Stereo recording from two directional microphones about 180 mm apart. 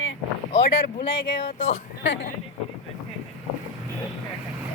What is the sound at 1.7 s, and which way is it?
Speech, 90° left.